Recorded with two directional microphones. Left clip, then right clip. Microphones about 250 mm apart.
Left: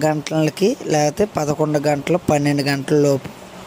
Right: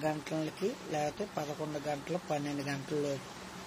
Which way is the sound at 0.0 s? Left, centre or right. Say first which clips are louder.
Left 16 dB; left.